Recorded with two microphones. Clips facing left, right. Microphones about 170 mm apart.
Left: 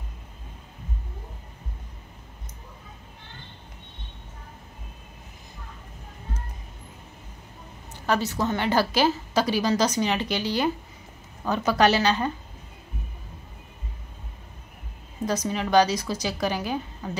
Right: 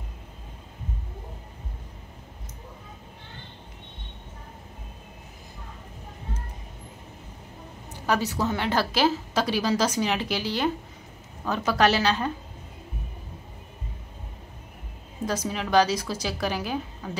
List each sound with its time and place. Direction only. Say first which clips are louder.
7.9 s a woman's voice: even; 10° right (ahead or behind)
15.2 s a woman's voice: left 2 dB; 5° right (ahead or behind)